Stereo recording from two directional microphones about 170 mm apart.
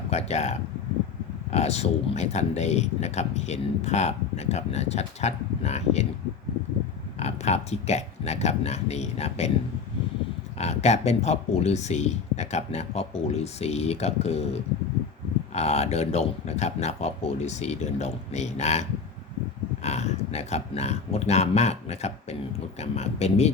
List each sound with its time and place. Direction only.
0.1 s speech: 40° left (ahead or behind)
7.2 s speech: 40° left (ahead or behind)
10.6 s speech: 40° left (ahead or behind)